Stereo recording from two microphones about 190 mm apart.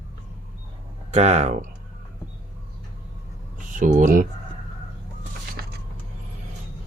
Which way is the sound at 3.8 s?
40° right (ahead or behind).